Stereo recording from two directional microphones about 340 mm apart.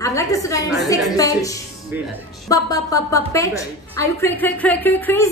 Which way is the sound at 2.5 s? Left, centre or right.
Centre.